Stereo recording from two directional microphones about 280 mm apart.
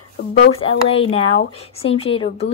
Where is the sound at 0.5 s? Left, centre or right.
Left.